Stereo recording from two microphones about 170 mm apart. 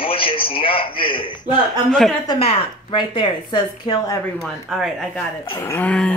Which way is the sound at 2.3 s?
30° left (ahead or behind).